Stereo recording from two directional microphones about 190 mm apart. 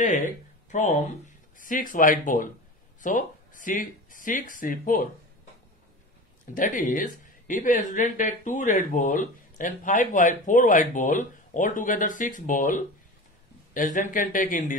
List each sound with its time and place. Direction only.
0.7 s speech: 40° left (ahead or behind)
6.5 s speech: 45° left (ahead or behind)